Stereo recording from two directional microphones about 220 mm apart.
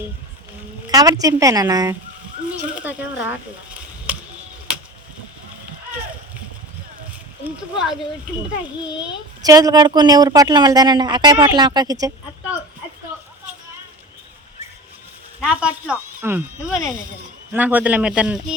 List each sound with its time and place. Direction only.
0.9 s speech: 15° right (ahead or behind)
7.4 s speech: centre (ahead or behind)
9.4 s speech: 15° right (ahead or behind)
15.4 s speech: 5° right (ahead or behind)